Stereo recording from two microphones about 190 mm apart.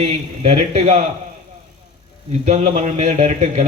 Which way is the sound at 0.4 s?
35° right (ahead or behind).